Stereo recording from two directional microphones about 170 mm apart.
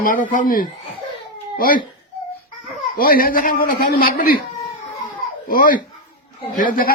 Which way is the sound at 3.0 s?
60° left (ahead or behind).